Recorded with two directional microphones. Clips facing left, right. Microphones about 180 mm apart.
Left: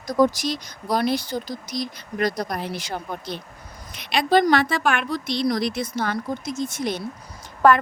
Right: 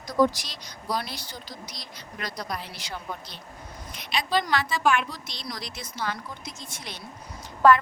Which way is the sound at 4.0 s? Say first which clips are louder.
Left 8 dB; 65° left (ahead or behind).